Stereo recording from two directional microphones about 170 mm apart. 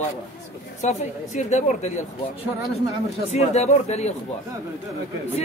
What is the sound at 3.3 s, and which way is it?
Speech, 40° left (ahead or behind).